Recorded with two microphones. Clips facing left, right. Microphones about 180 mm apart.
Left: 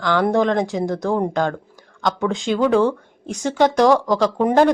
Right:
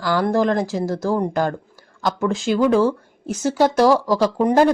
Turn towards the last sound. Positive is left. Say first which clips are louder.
# even
turn(degrees=0)  # may be behind; listen again after turning